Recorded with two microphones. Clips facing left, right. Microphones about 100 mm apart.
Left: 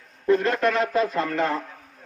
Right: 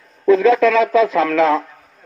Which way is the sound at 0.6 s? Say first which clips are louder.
Right 8 dB; 90° right.